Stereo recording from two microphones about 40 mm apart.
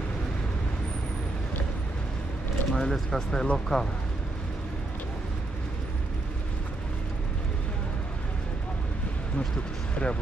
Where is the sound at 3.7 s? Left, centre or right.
Centre.